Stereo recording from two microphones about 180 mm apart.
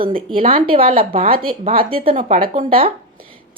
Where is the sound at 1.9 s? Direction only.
30° right (ahead or behind).